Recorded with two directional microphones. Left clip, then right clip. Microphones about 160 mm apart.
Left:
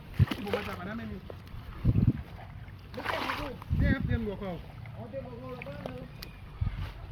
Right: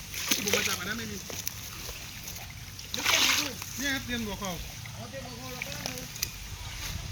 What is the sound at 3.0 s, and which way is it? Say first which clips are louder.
Splash: right 8 dB; 30° left (ahead or behind).